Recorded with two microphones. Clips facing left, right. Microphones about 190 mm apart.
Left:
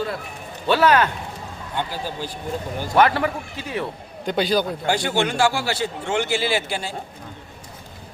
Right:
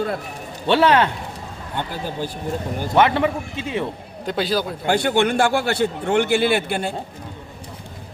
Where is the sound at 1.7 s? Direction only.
50° right (ahead or behind).